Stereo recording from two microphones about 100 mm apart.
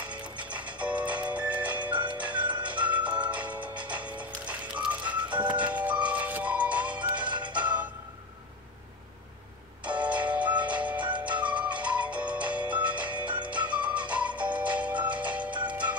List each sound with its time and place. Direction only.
0.0 s music: 15° right (ahead or behind)
7.2 s music: 50° right (ahead or behind)
7.5 s music: 15° right (ahead or behind)
9.8 s music: 15° right (ahead or behind)